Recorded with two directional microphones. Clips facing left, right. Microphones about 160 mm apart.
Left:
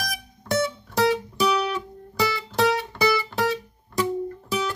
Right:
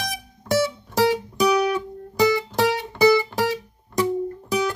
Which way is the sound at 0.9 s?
20° right (ahead or behind).